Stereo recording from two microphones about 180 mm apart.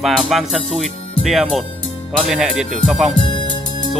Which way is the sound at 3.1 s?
25° left (ahead or behind).